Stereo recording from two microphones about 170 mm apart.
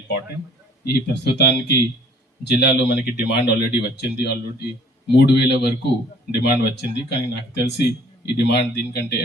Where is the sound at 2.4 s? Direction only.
75° left (ahead or behind).